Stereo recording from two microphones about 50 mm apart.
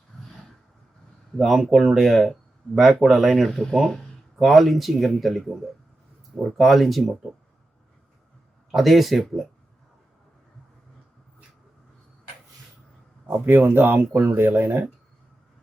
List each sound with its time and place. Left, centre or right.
1.4 s speech: centre
6.6 s speech: centre
8.7 s speech: centre
13.3 s speech: right